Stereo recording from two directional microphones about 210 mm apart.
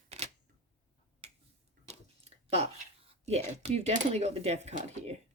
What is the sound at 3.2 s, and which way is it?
Speech, 30° right (ahead or behind).